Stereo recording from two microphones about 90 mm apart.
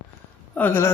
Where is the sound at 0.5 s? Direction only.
20° left (ahead or behind).